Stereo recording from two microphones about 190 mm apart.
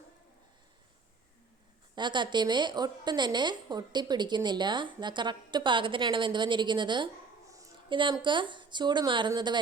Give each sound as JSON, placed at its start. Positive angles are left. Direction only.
{"t": 2.0, "sound": "speech", "side_deg": -25}